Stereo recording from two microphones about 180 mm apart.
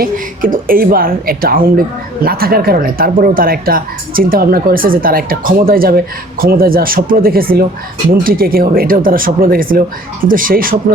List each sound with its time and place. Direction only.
0.0 s speech: 50° right (ahead or behind)